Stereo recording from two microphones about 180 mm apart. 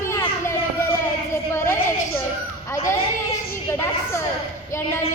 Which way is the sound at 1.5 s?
15° left (ahead or behind).